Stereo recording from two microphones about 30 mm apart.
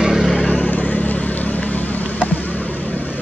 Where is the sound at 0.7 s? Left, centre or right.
Left.